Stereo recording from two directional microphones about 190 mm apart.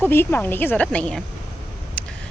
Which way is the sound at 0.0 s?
10° left (ahead or behind).